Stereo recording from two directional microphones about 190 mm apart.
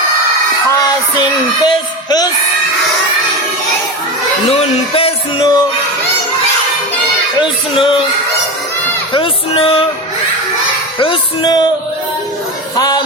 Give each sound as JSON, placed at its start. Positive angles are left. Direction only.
{"t": 1.6, "sound": "speech", "side_deg": 20}
{"t": 4.5, "sound": "music", "side_deg": 30}
{"t": 7.4, "sound": "speech", "side_deg": 25}
{"t": 9.1, "sound": "music", "side_deg": 30}
{"t": 11.0, "sound": "music", "side_deg": 25}
{"t": 12.7, "sound": "music", "side_deg": 20}